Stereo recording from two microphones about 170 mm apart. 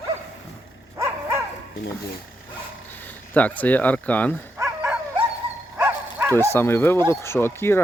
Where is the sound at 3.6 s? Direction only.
10° left (ahead or behind).